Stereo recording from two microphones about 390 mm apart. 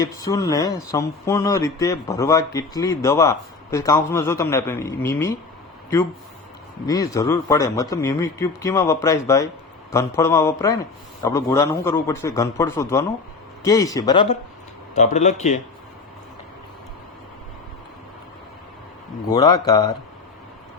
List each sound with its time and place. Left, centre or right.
0.2 s speech: centre
6.8 s speech: centre
19.3 s speech: centre